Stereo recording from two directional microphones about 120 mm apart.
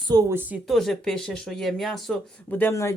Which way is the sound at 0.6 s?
Centre (ahead or behind).